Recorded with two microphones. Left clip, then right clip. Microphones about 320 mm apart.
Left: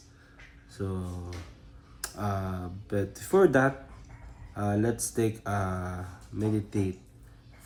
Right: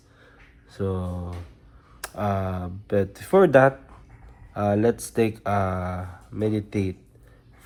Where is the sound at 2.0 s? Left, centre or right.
Right.